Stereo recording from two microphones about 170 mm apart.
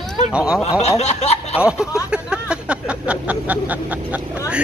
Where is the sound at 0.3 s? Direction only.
5° right (ahead or behind).